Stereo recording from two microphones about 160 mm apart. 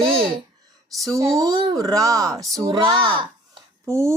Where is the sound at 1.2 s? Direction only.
20° right (ahead or behind).